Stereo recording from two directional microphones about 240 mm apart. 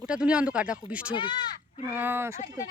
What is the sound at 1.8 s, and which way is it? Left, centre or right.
Speech, centre.